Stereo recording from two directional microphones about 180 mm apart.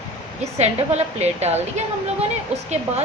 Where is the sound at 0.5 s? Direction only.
35° right (ahead or behind).